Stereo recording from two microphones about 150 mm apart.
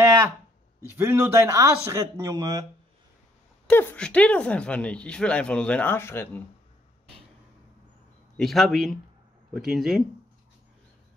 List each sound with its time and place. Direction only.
0.9 s speech: 15° right (ahead or behind)
3.6 s speech: 5° left (ahead or behind)
8.4 s a man's voice: centre (ahead or behind)